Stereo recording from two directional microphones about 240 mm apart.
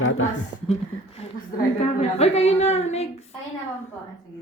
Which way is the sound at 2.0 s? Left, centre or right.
Left.